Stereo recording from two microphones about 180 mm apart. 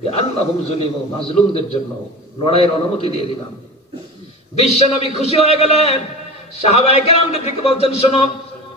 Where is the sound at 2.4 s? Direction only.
35° left (ahead or behind).